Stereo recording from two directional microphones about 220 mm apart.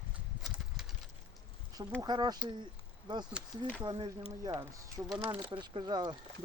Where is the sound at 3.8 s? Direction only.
20° right (ahead or behind).